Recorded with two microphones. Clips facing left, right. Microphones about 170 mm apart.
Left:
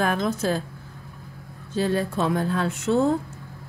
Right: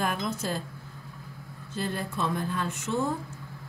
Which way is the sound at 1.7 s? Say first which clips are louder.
Left 8 dB; 90° left.